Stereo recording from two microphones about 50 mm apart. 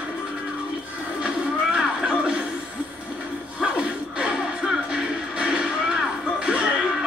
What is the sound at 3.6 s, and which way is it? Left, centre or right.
Music, centre.